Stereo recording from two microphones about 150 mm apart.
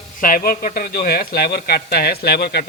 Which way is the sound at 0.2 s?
70° left (ahead or behind).